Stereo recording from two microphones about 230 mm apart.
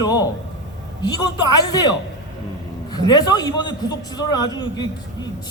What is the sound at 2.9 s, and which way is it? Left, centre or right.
A man's voice, centre.